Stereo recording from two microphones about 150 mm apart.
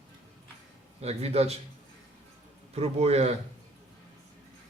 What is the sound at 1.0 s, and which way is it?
Speech, 45° right (ahead or behind).